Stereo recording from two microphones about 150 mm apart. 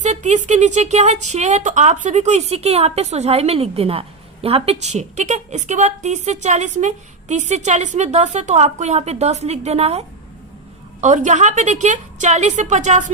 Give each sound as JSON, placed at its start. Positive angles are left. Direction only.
{"t": 0.0, "sound": "speech", "side_deg": -50}
{"t": 11.0, "sound": "speech", "side_deg": -50}